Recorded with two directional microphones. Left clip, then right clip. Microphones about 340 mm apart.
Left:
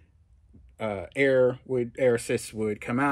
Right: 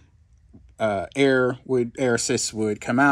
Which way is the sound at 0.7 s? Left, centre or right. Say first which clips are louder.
Right 6 dB; right.